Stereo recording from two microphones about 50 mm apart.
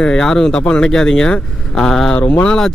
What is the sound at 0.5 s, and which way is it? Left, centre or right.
Speech, left.